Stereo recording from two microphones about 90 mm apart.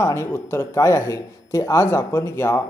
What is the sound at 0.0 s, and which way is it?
Speech, 30° left (ahead or behind).